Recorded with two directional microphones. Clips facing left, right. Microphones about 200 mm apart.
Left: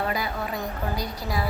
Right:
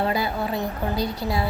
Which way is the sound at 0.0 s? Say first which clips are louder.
Right 4 dB; 30° right (ahead or behind).